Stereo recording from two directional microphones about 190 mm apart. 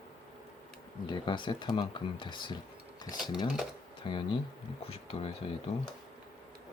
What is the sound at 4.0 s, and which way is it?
Speech, 25° left (ahead or behind).